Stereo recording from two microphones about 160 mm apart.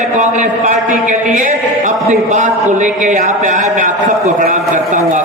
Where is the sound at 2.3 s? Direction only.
50° right (ahead or behind).